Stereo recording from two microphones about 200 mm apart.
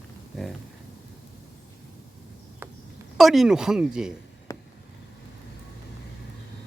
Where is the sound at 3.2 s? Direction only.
Centre (ahead or behind).